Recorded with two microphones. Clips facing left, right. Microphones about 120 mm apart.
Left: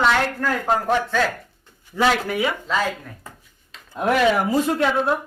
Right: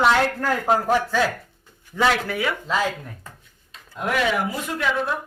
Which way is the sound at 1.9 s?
10° left (ahead or behind).